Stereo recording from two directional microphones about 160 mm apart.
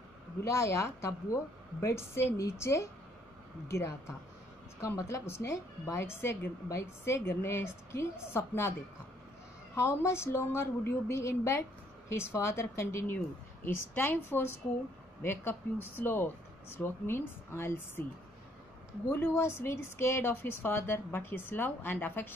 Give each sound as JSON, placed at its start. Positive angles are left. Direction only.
{"t": 0.4, "sound": "a woman's voice", "side_deg": 20}
{"t": 9.8, "sound": "a woman's voice", "side_deg": 15}
{"t": 16.0, "sound": "a woman's voice", "side_deg": 15}
{"t": 19.0, "sound": "a woman's voice", "side_deg": 15}